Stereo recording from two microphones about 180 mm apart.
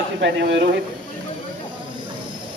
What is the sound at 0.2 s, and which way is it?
Speech, 75° right (ahead or behind).